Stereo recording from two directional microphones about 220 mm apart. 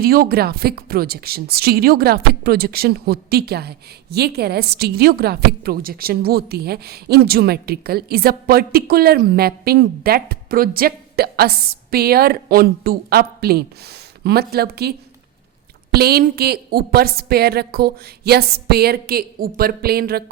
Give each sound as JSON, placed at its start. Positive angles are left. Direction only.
{"t": 0.0, "sound": "a woman's voice", "side_deg": -45}